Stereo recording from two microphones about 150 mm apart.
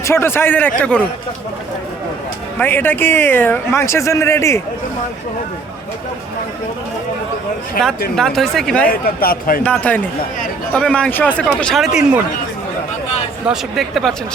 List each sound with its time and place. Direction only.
0.0 s speech: 15° left (ahead or behind)
2.6 s speech: 15° left (ahead or behind)
8.1 s speech: centre (ahead or behind)
8.9 s speech: 80° left
9.6 s speech: 10° left (ahead or behind)
13.5 s speech: centre (ahead or behind)